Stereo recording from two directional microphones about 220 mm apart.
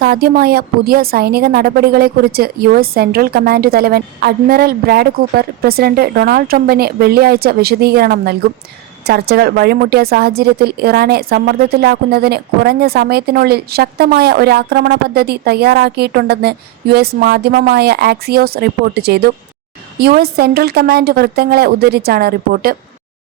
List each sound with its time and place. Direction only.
0.0 s a woman's voice: 45° right (ahead or behind)